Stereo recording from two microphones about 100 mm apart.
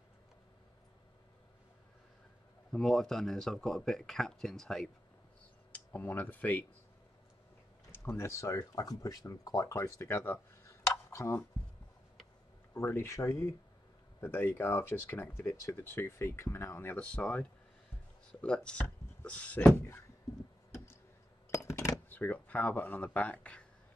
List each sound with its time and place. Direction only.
2.7 s speech: 5° left (ahead or behind)
5.7 s speech: 20° left (ahead or behind)
7.9 s speech: 25° left (ahead or behind)
12.7 s speech: 25° left (ahead or behind)
21.5 s a sound: 30° left (ahead or behind)
22.1 s speech: 20° left (ahead or behind)